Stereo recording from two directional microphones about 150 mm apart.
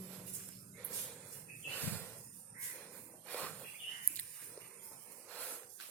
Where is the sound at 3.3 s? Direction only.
10° left (ahead or behind).